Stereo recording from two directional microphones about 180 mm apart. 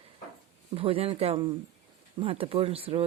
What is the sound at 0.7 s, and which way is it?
Speech, 30° right (ahead or behind).